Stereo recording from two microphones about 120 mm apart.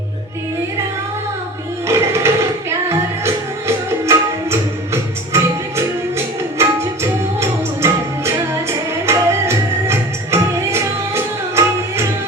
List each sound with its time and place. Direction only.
1.9 s music: 20° right (ahead or behind)